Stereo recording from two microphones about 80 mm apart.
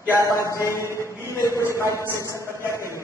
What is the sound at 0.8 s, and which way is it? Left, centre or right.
A man's voice, right.